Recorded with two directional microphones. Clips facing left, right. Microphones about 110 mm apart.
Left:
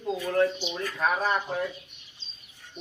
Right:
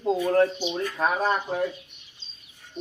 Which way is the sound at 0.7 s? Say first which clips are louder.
Right 2 dB; 35° right (ahead or behind).